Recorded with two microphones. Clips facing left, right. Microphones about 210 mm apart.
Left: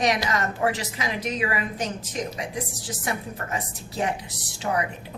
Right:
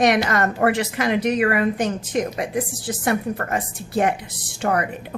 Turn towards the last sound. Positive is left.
turn(degrees=-60)  # may be behind; listen again after turning